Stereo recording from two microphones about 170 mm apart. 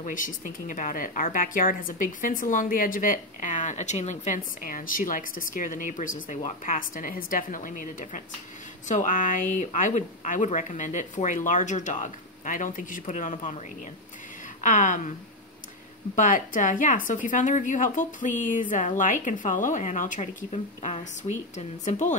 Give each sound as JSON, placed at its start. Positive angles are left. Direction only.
{"t": 0.0, "sound": "a woman's voice", "side_deg": 50}
{"t": 14.6, "sound": "a woman's voice", "side_deg": 50}
{"t": 16.2, "sound": "a woman's voice", "side_deg": 50}